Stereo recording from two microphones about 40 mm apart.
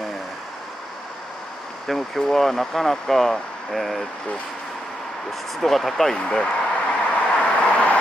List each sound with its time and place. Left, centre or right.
1.9 s speech: centre
5.6 s speech: centre
6.2 s a man's voice: left
6.9 s vehicle: left